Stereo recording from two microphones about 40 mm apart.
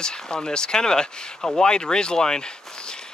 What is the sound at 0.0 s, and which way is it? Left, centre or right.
Speech, left.